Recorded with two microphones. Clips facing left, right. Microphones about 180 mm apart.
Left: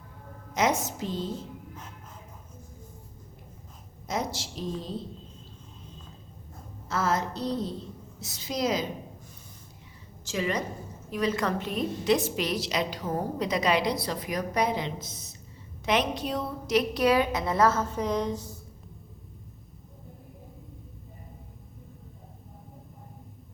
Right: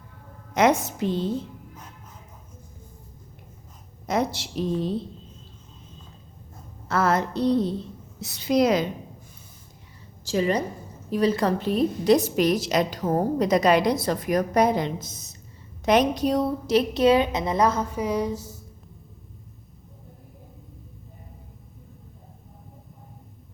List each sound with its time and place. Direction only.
0.5 s a woman's voice: 60° right (ahead or behind)
4.0 s a woman's voice: 60° right (ahead or behind)
6.8 s a woman's voice: 60° right (ahead or behind)
10.2 s a woman's voice: 35° right (ahead or behind); by 18.5 s 10° right (ahead or behind)